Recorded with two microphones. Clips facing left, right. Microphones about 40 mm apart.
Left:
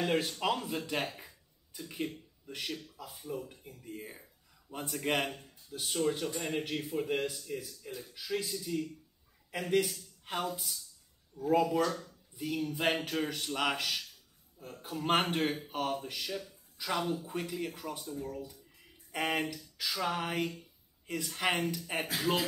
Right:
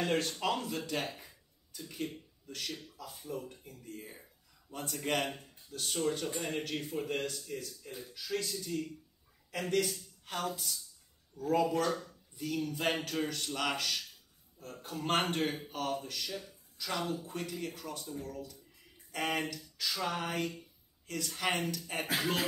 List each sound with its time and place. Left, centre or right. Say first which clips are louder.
0.0 s a man's voice: left 1 dB; centre
1.1 s a sound: left 1 dB; centre
2.4 s speech: left 2 dB; centre
3.2 s a man's voice: left 1 dB; centre
11.8 s speech: left 1 dB; centre
12.4 s a man's voice: left 1 dB; centre